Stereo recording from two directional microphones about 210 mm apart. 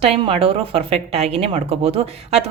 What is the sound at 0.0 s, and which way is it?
Speech, 25° right (ahead or behind).